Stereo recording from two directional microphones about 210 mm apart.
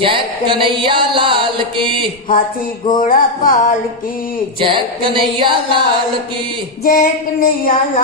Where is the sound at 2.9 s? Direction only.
40° left (ahead or behind).